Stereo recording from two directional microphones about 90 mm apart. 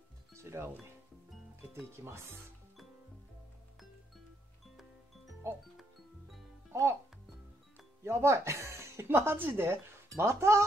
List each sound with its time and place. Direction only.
0.3 s music: 30° right (ahead or behind)
1.7 s speech: 30° right (ahead or behind)
6.7 s speech: 35° right (ahead or behind)
8.0 s speech: 30° right (ahead or behind)